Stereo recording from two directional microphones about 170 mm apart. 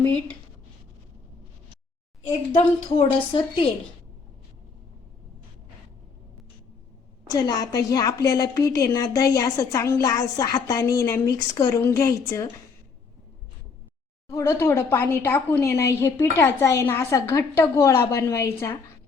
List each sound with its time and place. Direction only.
2.6 s a woman's voice: 35° left (ahead or behind)
7.3 s a woman's voice: 20° left (ahead or behind)
14.3 s speech: 15° left (ahead or behind)